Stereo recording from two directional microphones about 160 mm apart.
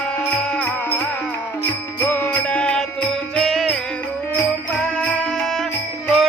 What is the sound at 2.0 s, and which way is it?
Music, 10° left (ahead or behind).